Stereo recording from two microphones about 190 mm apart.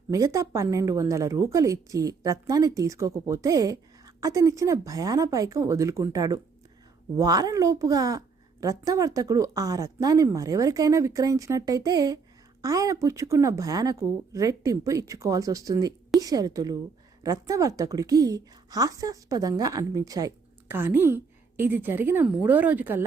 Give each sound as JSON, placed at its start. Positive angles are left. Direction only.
{"t": 0.1, "sound": "a woman's voice", "side_deg": -15}